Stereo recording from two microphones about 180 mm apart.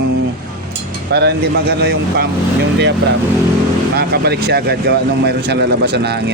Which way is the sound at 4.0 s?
60° right (ahead or behind).